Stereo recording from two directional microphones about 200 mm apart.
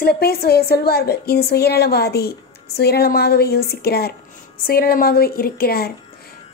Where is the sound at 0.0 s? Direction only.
50° left (ahead or behind).